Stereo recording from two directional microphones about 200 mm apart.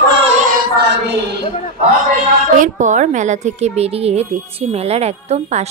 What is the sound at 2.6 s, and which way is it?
A woman's voice, 40° right (ahead or behind).